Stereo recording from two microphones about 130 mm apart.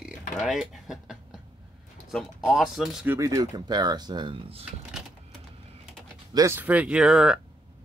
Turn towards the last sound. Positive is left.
turn(degrees=-5)  # may be behind; listen again after turning